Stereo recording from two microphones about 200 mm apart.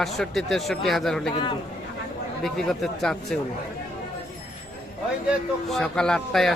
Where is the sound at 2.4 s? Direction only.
Centre (ahead or behind).